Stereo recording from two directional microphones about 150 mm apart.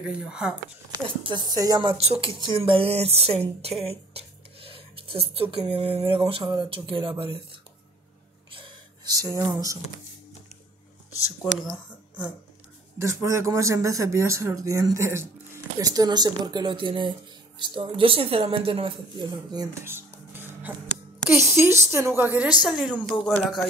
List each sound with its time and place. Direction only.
0.0 s speech: 5° right (ahead or behind)
1.0 s a woman's voice: 35° right (ahead or behind)
3.8 s writing: 40° right (ahead or behind)
5.3 s a woman's voice: 40° right (ahead or behind)
8.5 s a sound: 35° right (ahead or behind)
13.0 s a woman's voice: 20° right (ahead or behind)
23.0 s speech: centre (ahead or behind)